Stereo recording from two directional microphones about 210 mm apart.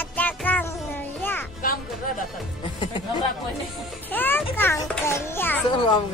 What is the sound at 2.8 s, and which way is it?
Chatter, 20° left (ahead or behind).